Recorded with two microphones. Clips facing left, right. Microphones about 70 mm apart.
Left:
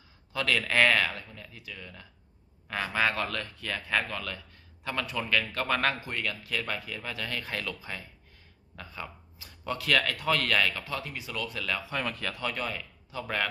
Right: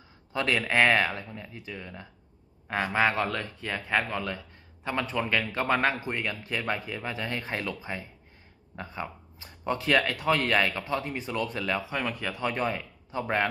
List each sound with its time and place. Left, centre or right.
0.3 s speech: right
12.0 s speech: centre; by 13.5 s right